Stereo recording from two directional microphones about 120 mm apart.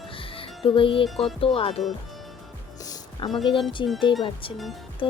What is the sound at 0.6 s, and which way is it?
Speech, 45° left (ahead or behind).